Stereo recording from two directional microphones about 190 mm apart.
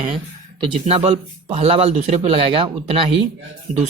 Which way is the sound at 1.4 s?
30° right (ahead or behind).